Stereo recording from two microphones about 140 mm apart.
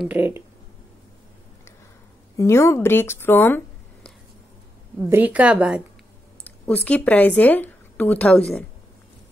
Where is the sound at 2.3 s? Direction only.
20° left (ahead or behind).